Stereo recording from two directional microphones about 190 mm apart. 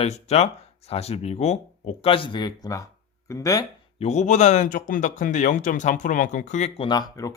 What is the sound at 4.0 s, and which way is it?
A man's voice, 35° left (ahead or behind).